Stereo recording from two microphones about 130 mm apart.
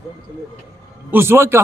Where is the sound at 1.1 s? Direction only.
20° right (ahead or behind).